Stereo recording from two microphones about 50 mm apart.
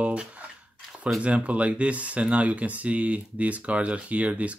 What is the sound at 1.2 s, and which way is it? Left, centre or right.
Speech, right.